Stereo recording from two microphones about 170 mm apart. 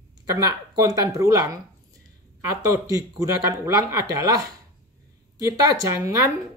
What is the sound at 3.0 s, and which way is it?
Speech, 20° right (ahead or behind).